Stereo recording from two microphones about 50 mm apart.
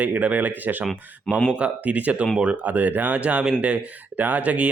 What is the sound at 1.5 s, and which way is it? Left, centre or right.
Speech, right.